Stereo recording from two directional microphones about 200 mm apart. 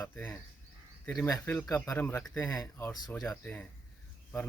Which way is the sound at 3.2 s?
5° left (ahead or behind).